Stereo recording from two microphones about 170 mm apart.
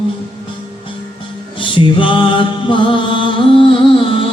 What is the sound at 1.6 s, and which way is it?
Music, 30° left (ahead or behind).